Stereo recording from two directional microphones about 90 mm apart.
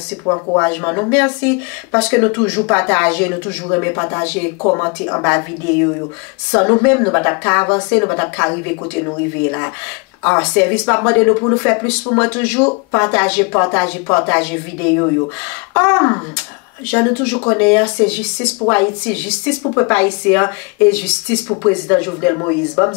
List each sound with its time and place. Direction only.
0.3 s speech: 30° left (ahead or behind)
4.2 s speech: 15° left (ahead or behind)
4.6 s speech: 30° left (ahead or behind)
6.5 s speech: 20° left (ahead or behind)
10.4 s speech: 15° left (ahead or behind)
19.6 s speech: 30° left (ahead or behind)
19.9 s speech: 20° left (ahead or behind)
21.5 s speech: 25° left (ahead or behind)